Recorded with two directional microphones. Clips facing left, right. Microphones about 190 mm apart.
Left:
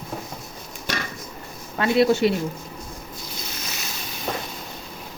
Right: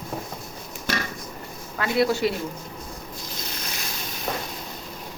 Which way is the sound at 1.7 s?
25° left (ahead or behind).